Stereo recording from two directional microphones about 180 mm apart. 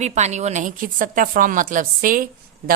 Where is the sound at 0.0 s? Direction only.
40° right (ahead or behind).